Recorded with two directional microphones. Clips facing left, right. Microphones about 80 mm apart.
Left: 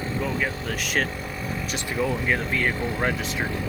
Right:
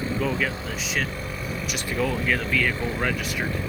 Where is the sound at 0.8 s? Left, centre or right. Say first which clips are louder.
Left 3 dB; left.